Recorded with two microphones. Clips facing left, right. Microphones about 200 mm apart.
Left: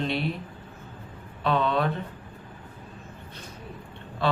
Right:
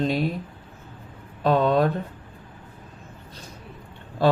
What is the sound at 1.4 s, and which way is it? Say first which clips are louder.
Speech: right 5 dB; 40° right (ahead or behind).